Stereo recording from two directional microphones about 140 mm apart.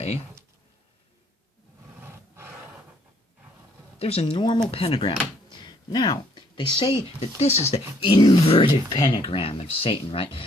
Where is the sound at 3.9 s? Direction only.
45° left (ahead or behind).